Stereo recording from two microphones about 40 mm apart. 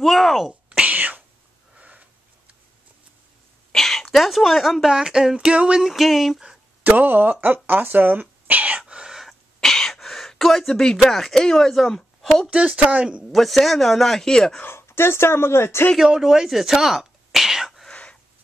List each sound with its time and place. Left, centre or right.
0.0 s a man's voice: centre
0.7 s whispering: right
1.8 s sniff: right
3.7 s speech: centre
5.5 s speech: right
5.8 s a man's voice: centre
6.8 s speech: right
9.3 s cough: centre
9.9 s gasp: centre
11.1 s speech: centre
12.4 s speech: right
13.2 s a man's voice: centre
14.6 s speech: left
16.0 s whispering: centre